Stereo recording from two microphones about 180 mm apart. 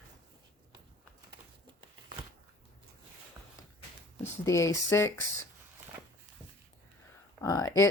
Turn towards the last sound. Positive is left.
turn(degrees=20)  # may be behind; listen again after turning